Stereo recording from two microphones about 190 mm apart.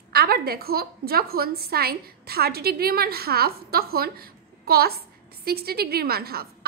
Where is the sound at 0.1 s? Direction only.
55° right (ahead or behind).